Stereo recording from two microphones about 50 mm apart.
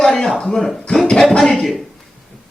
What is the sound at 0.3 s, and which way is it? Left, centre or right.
Speech, centre.